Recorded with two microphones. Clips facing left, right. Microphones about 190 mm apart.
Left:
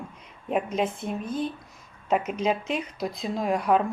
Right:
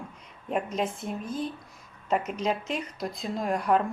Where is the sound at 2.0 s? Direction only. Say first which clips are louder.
Left 3 dB; 5° left (ahead or behind).